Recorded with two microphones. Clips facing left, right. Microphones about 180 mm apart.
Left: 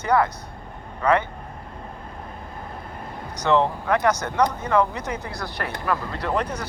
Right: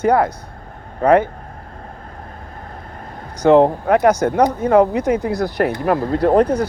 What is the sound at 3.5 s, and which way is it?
Speech, 50° right (ahead or behind).